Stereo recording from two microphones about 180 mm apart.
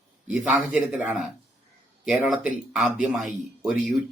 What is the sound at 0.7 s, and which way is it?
A man's voice, 5° right (ahead or behind).